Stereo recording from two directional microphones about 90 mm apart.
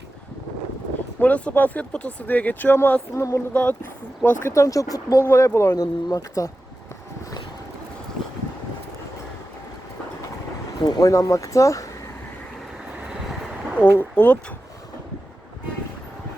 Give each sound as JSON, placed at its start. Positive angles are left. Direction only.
{"t": 1.2, "sound": "speech", "side_deg": 15}
{"t": 3.5, "sound": "speech", "side_deg": 15}
{"t": 4.4, "sound": "speech", "side_deg": 35}
{"t": 5.2, "sound": "speech", "side_deg": 30}
{"t": 10.8, "sound": "speech", "side_deg": 50}
{"t": 13.7, "sound": "speech", "side_deg": 20}